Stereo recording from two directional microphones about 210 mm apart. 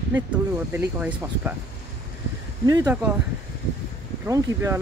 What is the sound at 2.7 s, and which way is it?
Speech, 20° right (ahead or behind).